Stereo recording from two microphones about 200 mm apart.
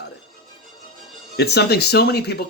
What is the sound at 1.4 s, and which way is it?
Speech, 55° left (ahead or behind).